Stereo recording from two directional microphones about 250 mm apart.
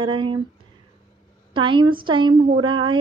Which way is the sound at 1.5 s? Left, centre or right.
Centre.